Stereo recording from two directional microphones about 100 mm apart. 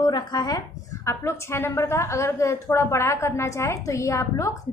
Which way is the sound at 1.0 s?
25° left (ahead or behind).